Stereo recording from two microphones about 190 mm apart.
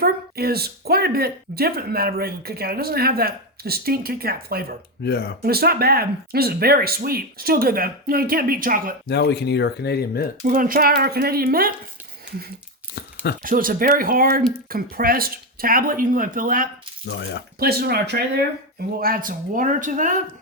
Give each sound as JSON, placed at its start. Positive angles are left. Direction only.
{"t": 0.0, "sound": "speech", "side_deg": -55}
{"t": 5.0, "sound": "speech", "side_deg": 55}
{"t": 5.4, "sound": "speech", "side_deg": -55}
{"t": 9.0, "sound": "speech", "side_deg": 60}
{"t": 10.4, "sound": "speech", "side_deg": -45}
{"t": 13.4, "sound": "speech", "side_deg": -45}
{"t": 17.1, "sound": "speech", "side_deg": 65}
{"t": 17.6, "sound": "speech", "side_deg": -55}